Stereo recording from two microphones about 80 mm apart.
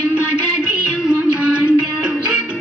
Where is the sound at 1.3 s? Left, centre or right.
Centre.